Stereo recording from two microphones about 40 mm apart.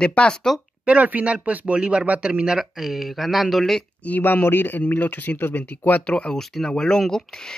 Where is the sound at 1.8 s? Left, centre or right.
Right.